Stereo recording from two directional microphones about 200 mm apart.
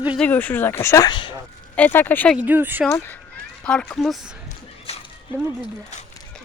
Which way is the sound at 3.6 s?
5° left (ahead or behind).